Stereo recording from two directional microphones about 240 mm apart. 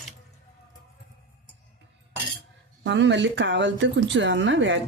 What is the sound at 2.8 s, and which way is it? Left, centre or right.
Speech, right.